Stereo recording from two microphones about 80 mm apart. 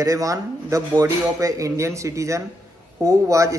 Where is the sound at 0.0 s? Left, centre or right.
Right.